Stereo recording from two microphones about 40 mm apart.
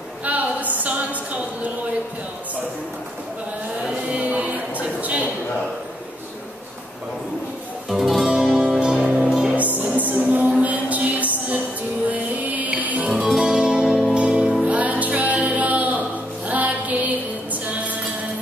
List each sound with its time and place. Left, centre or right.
0.2 s a sound: right
3.9 s a sound: right
7.9 s music: centre
8.3 s music: right
9.6 s music: right
13.4 s music: right
13.8 s music: centre
14.1 s music: right
14.7 s music: right